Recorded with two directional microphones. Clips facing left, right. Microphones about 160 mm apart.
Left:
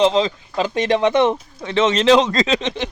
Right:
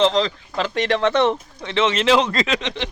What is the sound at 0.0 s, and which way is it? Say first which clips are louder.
Speech: left 2 dB; 15° left (ahead or behind).